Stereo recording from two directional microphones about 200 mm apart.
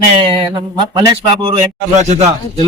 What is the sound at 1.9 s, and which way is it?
Speech, 35° right (ahead or behind).